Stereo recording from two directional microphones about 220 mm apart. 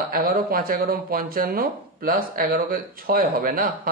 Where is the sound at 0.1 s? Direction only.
40° right (ahead or behind).